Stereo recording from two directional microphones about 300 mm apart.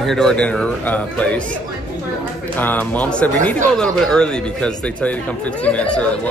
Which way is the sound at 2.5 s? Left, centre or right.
Centre.